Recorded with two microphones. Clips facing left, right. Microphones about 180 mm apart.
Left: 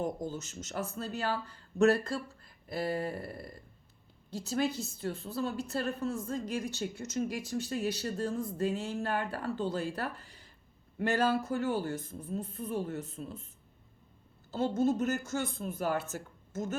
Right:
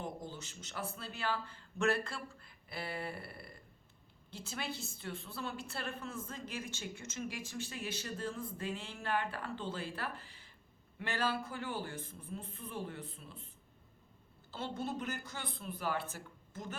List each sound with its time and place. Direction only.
0.0 s a woman's voice: 40° left (ahead or behind)
14.5 s speech: 40° left (ahead or behind)